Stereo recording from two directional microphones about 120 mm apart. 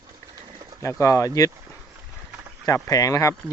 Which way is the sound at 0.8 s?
25° left (ahead or behind).